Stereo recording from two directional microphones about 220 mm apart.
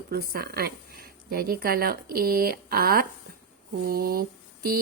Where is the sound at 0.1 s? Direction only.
45° right (ahead or behind).